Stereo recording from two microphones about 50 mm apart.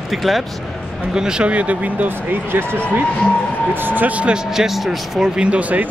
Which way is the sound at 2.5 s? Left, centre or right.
Right.